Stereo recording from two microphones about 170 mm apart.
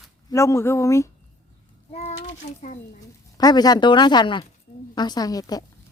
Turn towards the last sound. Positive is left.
turn(degrees=20)  # may be behind; listen again after turning